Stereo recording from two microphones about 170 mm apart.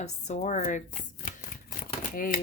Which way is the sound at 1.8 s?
55° left (ahead or behind).